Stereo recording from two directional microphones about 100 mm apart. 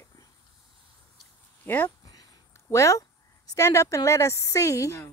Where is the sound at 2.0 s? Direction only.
40° left (ahead or behind).